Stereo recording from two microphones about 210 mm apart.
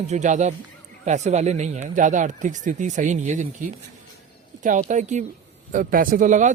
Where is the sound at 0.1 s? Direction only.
35° right (ahead or behind).